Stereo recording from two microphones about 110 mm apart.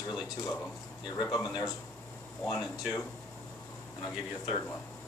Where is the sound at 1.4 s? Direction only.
35° left (ahead or behind).